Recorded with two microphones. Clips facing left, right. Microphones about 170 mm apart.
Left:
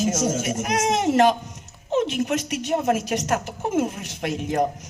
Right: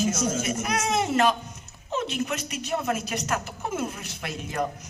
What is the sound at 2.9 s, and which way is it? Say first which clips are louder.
Speech: left 6 dB; 45° left (ahead or behind).